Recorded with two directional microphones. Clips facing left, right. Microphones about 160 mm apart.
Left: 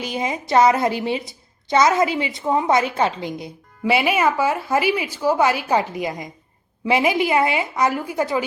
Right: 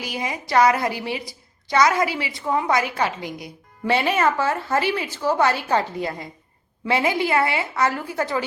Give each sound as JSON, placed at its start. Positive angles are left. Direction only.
{"t": 0.0, "sound": "a woman's voice", "side_deg": 25}
{"t": 3.8, "sound": "a woman's voice", "side_deg": 10}